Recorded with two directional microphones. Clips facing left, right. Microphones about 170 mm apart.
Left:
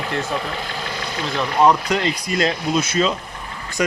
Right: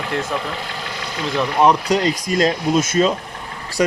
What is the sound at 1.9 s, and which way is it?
Speech, 40° right (ahead or behind).